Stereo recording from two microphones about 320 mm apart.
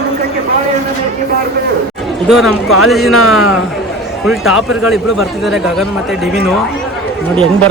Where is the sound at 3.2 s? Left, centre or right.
Left.